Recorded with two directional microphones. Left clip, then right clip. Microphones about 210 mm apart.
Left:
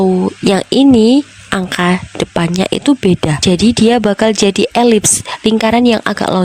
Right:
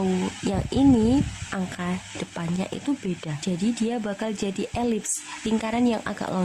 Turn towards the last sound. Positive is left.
turn(degrees=45)  # may be behind; listen again after turning